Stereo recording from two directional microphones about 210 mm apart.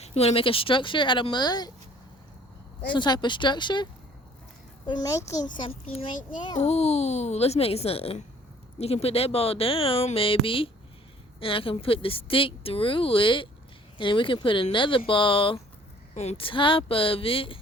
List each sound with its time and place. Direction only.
0.0 s a child's voice: 30° left (ahead or behind)
2.8 s a child's voice: 20° left (ahead or behind)
4.9 s a child's voice: 20° left (ahead or behind)